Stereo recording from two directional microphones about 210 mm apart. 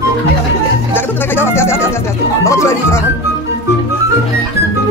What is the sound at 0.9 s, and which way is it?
Music, 10° left (ahead or behind).